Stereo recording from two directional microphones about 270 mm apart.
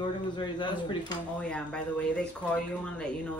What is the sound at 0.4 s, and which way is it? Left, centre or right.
Speech, centre.